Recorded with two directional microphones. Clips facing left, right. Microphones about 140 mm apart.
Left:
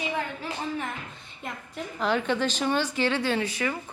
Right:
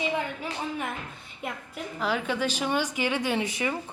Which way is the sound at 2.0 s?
5° right (ahead or behind).